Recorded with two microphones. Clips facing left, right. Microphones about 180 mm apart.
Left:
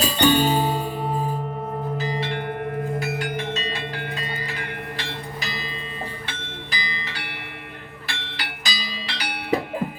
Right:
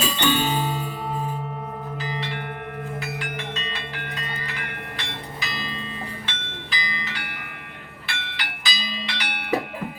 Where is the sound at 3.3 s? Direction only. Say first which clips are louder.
Left 5 dB; 35° left (ahead or behind).